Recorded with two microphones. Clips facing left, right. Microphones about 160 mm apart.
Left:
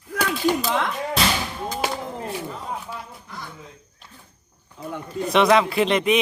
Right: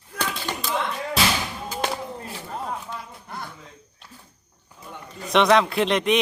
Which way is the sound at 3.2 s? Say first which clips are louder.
Right 2 dB; 60° right (ahead or behind).